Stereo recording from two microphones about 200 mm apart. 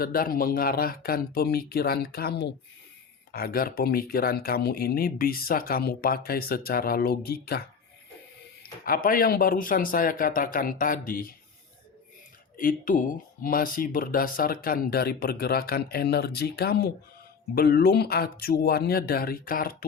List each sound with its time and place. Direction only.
0.0 s speech: 45° left (ahead or behind)
8.8 s speech: 45° left (ahead or behind)
12.5 s speech: 45° left (ahead or behind)